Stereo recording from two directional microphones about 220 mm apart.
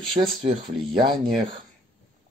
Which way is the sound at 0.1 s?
25° right (ahead or behind).